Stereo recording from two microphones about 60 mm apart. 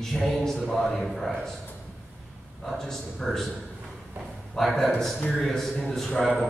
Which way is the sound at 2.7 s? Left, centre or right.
Centre.